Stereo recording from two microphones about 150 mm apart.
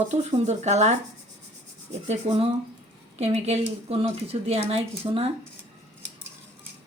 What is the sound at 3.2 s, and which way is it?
Speech, 45° right (ahead or behind).